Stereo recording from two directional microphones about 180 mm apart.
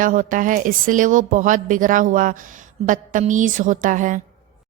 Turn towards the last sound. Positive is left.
turn(degrees=-45)  # may be behind; listen again after turning